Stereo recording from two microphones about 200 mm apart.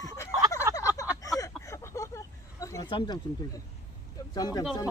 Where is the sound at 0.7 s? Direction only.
15° right (ahead or behind).